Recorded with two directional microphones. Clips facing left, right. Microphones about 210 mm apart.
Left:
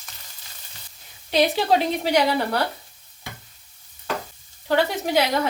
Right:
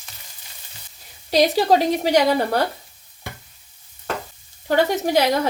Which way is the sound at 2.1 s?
45° right (ahead or behind).